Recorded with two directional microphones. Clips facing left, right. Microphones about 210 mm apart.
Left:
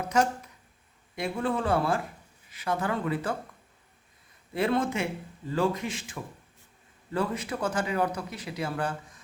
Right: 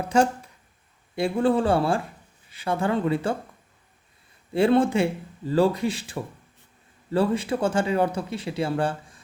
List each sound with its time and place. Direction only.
0.0 s speech: 30° right (ahead or behind)
4.5 s speech: 30° right (ahead or behind)